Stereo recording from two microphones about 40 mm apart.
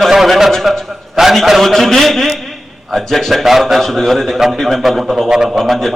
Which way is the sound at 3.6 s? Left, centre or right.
Centre.